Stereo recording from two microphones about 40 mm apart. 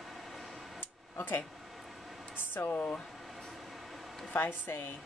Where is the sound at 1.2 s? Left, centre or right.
Left.